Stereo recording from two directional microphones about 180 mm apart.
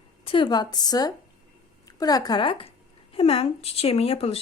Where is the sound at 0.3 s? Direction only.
25° left (ahead or behind).